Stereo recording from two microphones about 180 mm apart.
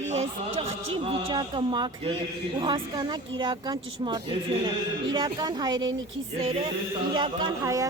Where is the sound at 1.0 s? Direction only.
25° right (ahead or behind).